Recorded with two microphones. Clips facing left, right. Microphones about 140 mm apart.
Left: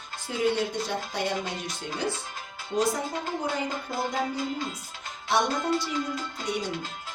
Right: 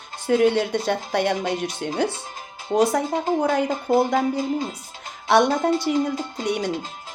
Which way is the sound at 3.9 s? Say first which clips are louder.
Right 17 dB; 65° right (ahead or behind).